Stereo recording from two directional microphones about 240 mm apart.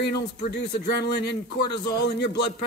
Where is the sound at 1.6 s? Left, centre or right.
Centre.